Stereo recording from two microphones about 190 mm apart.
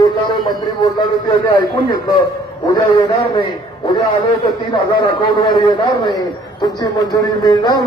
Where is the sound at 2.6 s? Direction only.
20° left (ahead or behind).